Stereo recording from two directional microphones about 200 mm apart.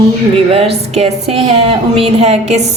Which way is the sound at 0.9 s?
30° right (ahead or behind).